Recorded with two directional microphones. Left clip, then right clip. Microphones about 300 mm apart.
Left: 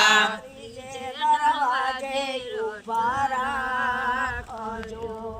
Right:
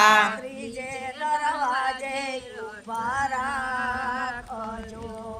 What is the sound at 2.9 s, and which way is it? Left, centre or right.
Male singing, left.